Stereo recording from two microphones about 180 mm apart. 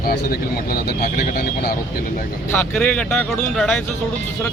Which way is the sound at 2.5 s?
10° left (ahead or behind).